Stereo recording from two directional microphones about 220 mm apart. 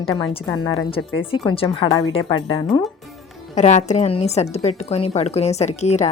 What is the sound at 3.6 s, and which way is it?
A woman's voice, 30° left (ahead or behind).